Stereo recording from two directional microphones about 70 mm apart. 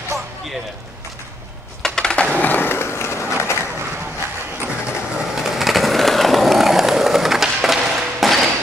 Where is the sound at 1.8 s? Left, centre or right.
Centre; by 3.5 s left.